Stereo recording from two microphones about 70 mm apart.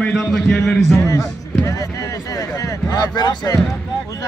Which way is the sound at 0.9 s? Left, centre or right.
Left.